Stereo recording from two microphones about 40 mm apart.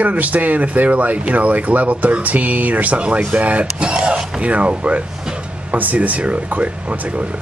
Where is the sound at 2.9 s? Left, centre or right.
Right.